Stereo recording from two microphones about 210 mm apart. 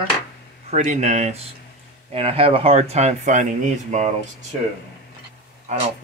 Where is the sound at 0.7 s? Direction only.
35° right (ahead or behind).